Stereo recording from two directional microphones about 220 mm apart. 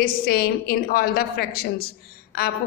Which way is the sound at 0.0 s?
45° left (ahead or behind).